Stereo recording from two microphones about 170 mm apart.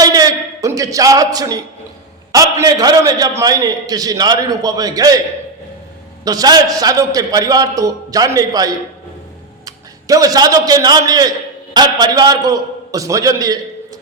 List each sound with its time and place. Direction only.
0.0 s a sound: 20° right (ahead or behind)
2.3 s a man's voice: 20° right (ahead or behind)
6.2 s a man's voice: 20° right (ahead or behind)